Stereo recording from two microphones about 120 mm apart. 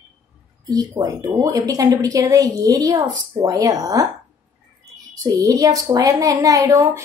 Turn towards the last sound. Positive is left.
turn(degrees=-25)  # may be behind; listen again after turning